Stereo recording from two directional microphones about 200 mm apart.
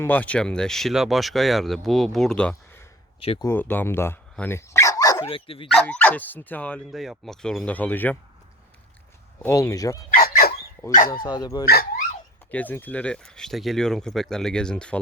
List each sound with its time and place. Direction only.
0.0 s speech: 10° left (ahead or behind)
3.2 s speech: 30° left (ahead or behind)
3.4 s speech: 10° left (ahead or behind); by 5.6 s 25° left (ahead or behind)
5.6 s speech: 5° left (ahead or behind)
9.4 s speech: 15° left (ahead or behind)
10.2 s dog: 50° left (ahead or behind)
11.1 s speech: 20° left (ahead or behind)
11.7 s dog: 50° left (ahead or behind)
12.5 s speech: 10° left (ahead or behind)